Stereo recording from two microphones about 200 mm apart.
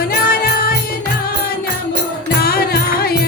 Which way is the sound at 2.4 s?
50° left (ahead or behind).